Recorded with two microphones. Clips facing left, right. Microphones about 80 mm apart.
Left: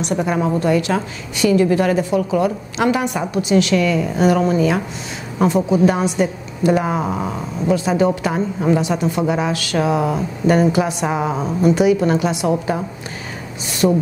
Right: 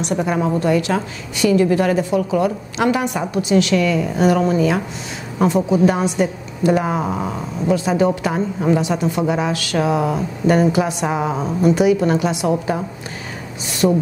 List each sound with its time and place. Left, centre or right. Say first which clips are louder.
0.1 s a woman's voice: even; left
4.2 s a woman's voice: even; left
13.8 s a woman's voice: even; left